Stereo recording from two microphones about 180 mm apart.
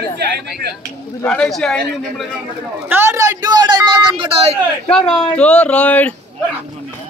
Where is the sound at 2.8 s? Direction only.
10° right (ahead or behind); by 4.6 s 30° right (ahead or behind).